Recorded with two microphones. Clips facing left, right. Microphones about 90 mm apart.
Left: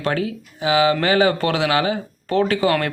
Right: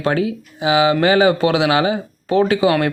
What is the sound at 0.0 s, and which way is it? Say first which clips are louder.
A man's voice: right 4 dB; 20° right (ahead or behind).